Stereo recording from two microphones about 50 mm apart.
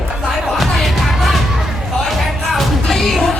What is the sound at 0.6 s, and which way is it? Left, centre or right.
Music, centre.